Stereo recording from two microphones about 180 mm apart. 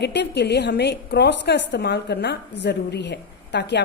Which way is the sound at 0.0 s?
70° left (ahead or behind).